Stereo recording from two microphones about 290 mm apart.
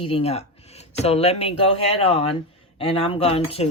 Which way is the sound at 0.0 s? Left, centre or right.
Centre.